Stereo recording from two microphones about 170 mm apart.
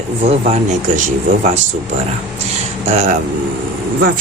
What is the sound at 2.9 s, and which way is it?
Speech, 45° right (ahead or behind).